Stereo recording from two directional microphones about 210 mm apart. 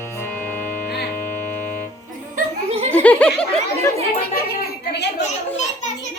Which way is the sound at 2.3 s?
30° right (ahead or behind).